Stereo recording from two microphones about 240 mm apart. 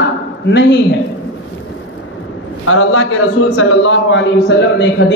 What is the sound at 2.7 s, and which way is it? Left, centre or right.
A man's voice, left.